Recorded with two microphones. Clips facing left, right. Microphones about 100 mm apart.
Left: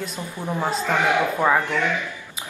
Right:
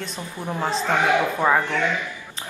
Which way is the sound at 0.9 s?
20° right (ahead or behind).